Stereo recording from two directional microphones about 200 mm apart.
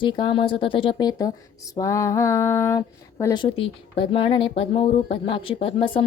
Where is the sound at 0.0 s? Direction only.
25° left (ahead or behind).